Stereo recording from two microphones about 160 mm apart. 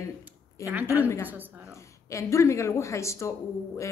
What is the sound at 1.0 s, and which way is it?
A woman's voice, 15° left (ahead or behind).